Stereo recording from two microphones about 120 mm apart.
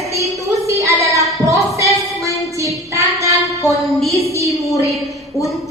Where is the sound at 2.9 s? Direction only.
25° right (ahead or behind).